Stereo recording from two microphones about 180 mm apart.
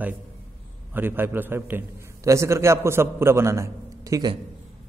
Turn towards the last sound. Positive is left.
turn(degrees=-20)  # may be behind; listen again after turning